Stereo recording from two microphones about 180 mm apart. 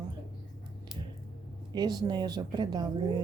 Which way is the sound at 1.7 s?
20° right (ahead or behind).